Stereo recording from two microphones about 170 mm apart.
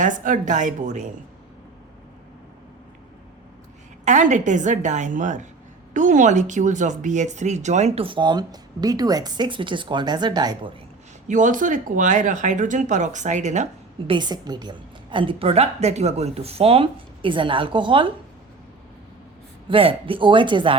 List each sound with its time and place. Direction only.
0.0 s speech: 50° right (ahead or behind)
4.0 s speech: 45° right (ahead or behind); by 10.7 s 25° right (ahead or behind)
11.3 s speech: 50° right (ahead or behind)
14.1 s a woman's voice: 25° right (ahead or behind)
19.6 s speech: 30° right (ahead or behind)